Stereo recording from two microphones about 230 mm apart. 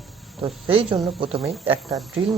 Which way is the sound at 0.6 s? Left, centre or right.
Right.